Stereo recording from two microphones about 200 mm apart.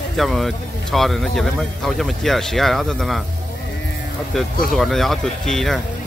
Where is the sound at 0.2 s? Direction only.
Centre (ahead or behind).